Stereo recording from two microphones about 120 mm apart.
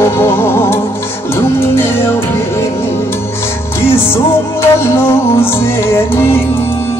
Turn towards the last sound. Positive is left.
turn(degrees=20)  # may be behind; listen again after turning